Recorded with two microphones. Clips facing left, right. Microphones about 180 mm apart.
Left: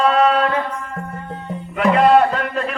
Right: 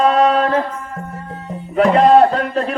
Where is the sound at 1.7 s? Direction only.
35° right (ahead or behind).